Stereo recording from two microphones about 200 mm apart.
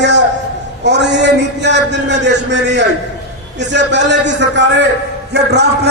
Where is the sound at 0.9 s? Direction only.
60° right (ahead or behind).